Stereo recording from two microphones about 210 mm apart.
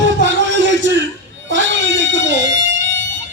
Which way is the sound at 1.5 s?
60° right (ahead or behind).